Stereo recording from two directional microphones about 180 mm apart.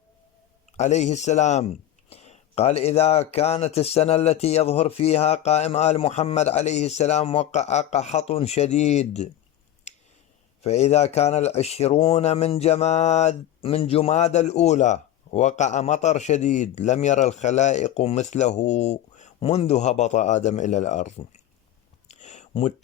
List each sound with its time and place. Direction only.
0.8 s speech: 40° left (ahead or behind)
10.6 s speech: 35° left (ahead or behind)
22.1 s a sound: 40° left (ahead or behind)